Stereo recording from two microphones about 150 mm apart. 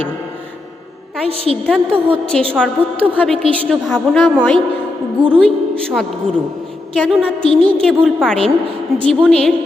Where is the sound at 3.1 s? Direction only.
10° left (ahead or behind).